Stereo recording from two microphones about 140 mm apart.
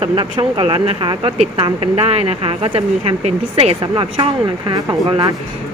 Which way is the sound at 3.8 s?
35° right (ahead or behind).